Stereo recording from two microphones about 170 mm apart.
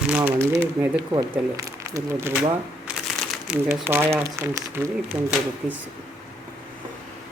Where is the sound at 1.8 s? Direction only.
15° right (ahead or behind).